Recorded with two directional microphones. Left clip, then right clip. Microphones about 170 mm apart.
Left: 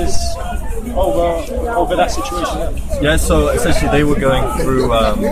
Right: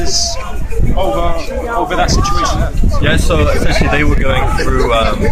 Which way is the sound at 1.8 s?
20° left (ahead or behind).